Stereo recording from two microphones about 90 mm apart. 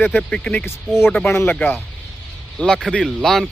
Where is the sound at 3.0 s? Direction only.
Centre (ahead or behind).